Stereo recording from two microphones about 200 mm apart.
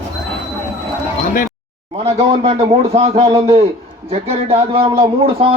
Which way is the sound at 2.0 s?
30° right (ahead or behind).